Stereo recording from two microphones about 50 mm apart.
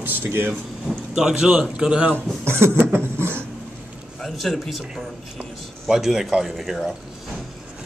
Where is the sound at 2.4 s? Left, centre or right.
Right.